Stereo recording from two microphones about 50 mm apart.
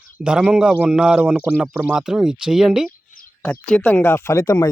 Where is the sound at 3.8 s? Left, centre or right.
Left.